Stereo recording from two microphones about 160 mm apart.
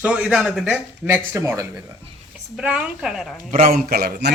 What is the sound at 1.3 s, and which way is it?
Speech, 20° right (ahead or behind).